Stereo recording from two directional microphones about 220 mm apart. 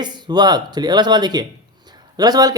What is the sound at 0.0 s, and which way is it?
Speech, 20° right (ahead or behind).